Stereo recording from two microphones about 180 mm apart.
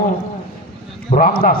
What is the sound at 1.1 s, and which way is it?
Speech, 40° left (ahead or behind).